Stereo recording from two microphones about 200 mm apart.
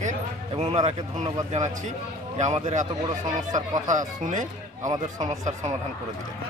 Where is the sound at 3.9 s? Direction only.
40° right (ahead or behind).